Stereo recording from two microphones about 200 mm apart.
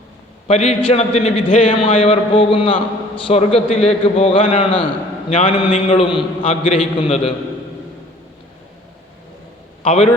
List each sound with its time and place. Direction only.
0.4 s a man's voice: 30° left (ahead or behind)
9.8 s a man's voice: 30° left (ahead or behind)